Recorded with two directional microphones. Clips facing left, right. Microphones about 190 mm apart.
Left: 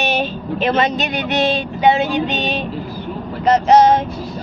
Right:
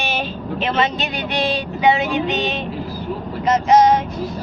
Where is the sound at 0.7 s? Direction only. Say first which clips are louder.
Left 3 dB; 45° left (ahead or behind).